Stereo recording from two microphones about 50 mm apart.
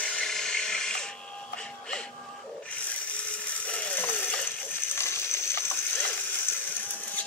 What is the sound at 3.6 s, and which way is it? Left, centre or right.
Ratchet, left.